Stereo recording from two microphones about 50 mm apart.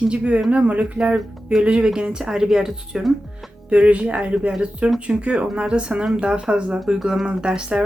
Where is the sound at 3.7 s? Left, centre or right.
Right.